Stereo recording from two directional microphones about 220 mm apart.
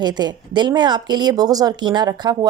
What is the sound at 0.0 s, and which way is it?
Speech, 20° right (ahead or behind).